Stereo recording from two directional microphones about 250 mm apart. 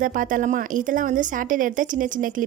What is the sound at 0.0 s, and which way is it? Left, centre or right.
A woman's voice, right.